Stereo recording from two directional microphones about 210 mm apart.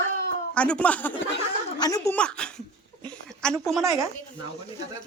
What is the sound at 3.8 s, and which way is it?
Speech, 15° right (ahead or behind).